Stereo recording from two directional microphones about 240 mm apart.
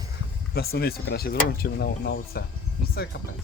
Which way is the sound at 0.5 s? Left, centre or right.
Left.